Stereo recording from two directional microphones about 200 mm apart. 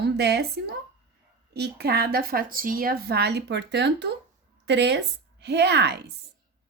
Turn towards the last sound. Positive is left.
turn(degrees=-55)  # may be behind; listen again after turning